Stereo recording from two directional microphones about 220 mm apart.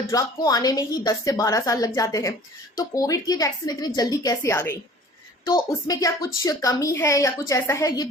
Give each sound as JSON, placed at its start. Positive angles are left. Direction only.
{"t": 0.1, "sound": "a woman's voice", "side_deg": 15}
{"t": 5.9, "sound": "a woman's voice", "side_deg": 15}